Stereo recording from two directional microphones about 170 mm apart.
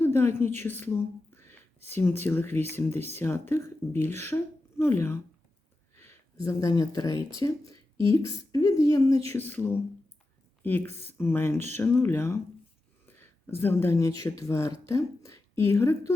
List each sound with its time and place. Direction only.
0.0 s a woman's voice: 15° left (ahead or behind)
13.1 s a sound: 10° left (ahead or behind)
14.3 s speech: 15° left (ahead or behind)